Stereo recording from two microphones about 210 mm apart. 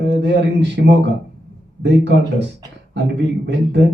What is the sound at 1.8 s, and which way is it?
A man's voice, 55° right (ahead or behind).